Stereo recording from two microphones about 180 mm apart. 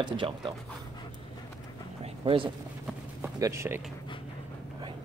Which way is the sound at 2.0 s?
30° right (ahead or behind).